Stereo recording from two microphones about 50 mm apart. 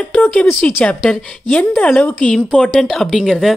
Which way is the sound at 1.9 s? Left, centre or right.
Left.